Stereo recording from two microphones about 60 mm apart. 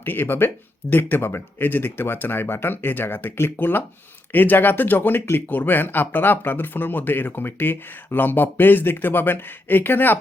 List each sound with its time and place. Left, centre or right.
0.0 s speech: left